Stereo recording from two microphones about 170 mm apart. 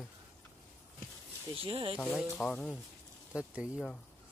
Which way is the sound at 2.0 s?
Centre (ahead or behind).